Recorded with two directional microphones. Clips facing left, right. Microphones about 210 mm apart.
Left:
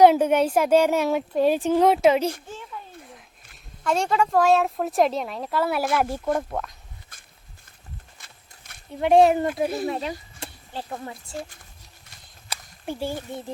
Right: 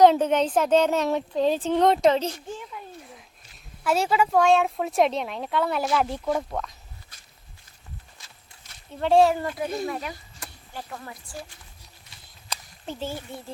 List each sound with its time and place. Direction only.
0.0 s a woman's voice: 10° left (ahead or behind)
3.8 s a woman's voice: 5° right (ahead or behind)
7.1 s walk: 50° left (ahead or behind)
8.7 s a sound: 50° left (ahead or behind)
9.0 s speech: 15° left (ahead or behind)
12.5 s speech: 10° left (ahead or behind)